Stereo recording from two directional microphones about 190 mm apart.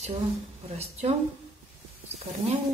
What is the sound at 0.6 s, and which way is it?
Speech, 35° right (ahead or behind).